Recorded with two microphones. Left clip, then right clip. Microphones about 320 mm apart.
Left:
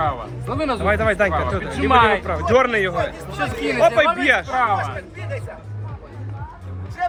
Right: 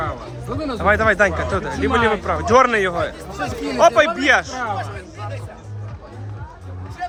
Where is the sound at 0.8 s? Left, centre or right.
Centre.